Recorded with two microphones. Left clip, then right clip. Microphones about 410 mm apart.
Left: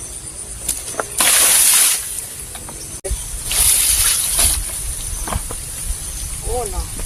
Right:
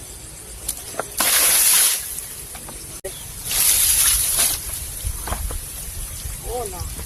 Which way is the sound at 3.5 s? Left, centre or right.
Right.